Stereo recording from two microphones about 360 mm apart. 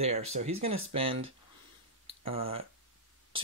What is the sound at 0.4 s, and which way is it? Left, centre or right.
Speech, right.